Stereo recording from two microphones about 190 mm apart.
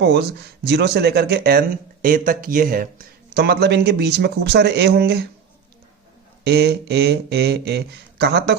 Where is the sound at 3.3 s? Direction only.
60° right (ahead or behind).